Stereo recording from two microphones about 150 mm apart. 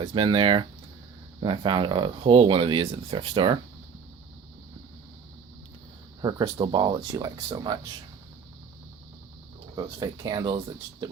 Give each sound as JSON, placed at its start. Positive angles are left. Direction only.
{"t": 0.0, "sound": "speech", "side_deg": -35}
{"t": 6.4, "sound": "speech", "side_deg": -35}
{"t": 9.7, "sound": "speech", "side_deg": -25}